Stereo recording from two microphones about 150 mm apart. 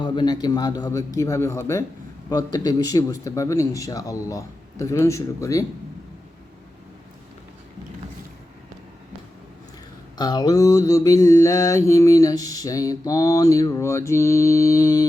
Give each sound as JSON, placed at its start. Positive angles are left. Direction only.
{"t": 0.0, "sound": "mantra", "side_deg": 30}
{"t": 10.2, "sound": "mantra", "side_deg": 30}